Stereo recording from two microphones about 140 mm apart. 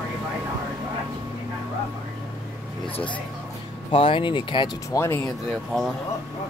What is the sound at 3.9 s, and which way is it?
Speech, 40° left (ahead or behind).